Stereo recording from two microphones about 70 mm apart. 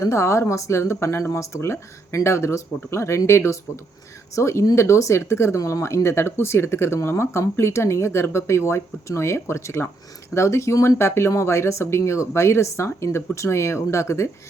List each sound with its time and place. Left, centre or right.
0.0 s a woman's voice: left